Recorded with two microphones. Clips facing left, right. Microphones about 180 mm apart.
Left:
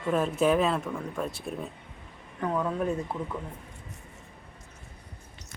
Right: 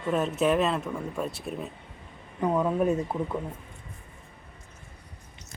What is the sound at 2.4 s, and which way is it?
Speech, 15° right (ahead or behind).